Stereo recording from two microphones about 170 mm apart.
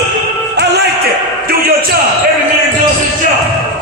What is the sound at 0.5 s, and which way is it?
Music, 70° right (ahead or behind).